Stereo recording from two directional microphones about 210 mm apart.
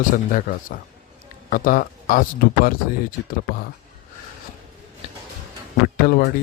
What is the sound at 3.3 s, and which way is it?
Speech, 45° left (ahead or behind).